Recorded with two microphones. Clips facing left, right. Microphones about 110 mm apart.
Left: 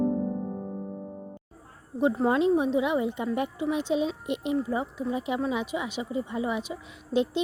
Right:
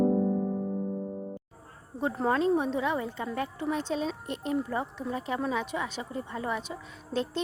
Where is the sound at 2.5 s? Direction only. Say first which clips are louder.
Left 3 dB; 10° left (ahead or behind).